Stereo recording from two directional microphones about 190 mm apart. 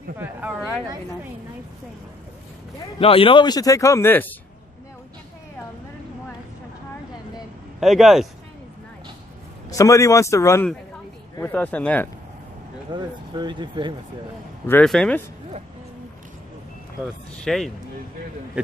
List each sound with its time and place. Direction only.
0.2 s a sound: 5° right (ahead or behind)
3.0 s speech: 30° left (ahead or behind); by 4.3 s 10° left (ahead or behind)
7.8 s speech: centre (ahead or behind)
9.7 s speech: 15° left (ahead or behind)
12.9 s speech: 25° right (ahead or behind)
14.7 s speech: 5° left (ahead or behind)
17.0 s speech: centre (ahead or behind)